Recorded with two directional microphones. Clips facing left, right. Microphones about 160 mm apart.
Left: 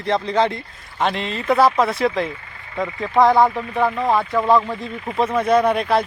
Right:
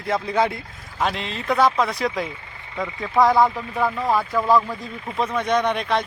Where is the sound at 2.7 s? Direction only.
20° left (ahead or behind).